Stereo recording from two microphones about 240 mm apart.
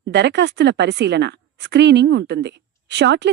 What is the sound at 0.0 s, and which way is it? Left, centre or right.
A woman's voice, right.